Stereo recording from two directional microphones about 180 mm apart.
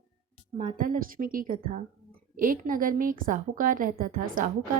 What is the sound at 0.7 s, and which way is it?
A woman's voice, 50° right (ahead or behind).